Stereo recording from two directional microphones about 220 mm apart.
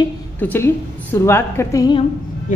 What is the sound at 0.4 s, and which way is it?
A woman's voice, 10° left (ahead or behind).